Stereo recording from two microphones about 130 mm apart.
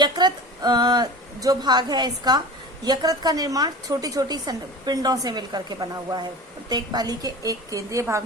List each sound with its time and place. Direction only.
0.0 s a woman's voice: 35° right (ahead or behind)